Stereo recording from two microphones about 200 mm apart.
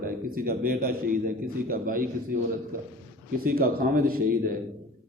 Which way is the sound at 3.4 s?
45° right (ahead or behind).